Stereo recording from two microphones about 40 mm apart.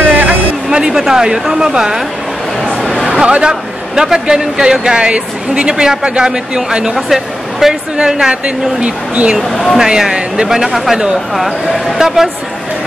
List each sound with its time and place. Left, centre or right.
0.0 s a sound: right
0.7 s a man's voice: centre
2.6 s a sound: centre
3.3 s a woman's voice: right
3.9 s a woman's voice: centre
8.5 s a woman's voice: right
9.4 s speech: centre
9.8 s a man's voice: centre
10.6 s a man's voice: centre